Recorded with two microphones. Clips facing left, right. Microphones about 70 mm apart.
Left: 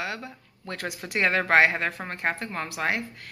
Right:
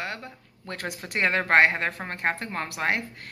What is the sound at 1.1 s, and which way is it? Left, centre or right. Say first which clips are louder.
Speech: even; right.